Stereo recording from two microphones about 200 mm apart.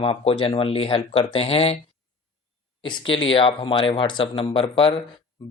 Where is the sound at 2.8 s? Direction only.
25° left (ahead or behind).